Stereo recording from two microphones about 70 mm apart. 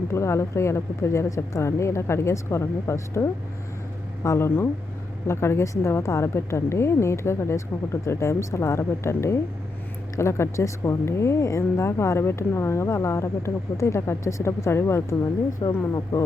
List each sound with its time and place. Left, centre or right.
0.1 s speech: left
15.6 s speech: left